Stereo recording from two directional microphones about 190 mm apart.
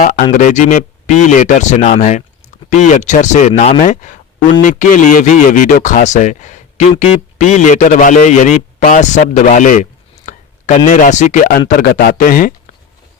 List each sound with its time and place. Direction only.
0.0 s speech: 45° left (ahead or behind)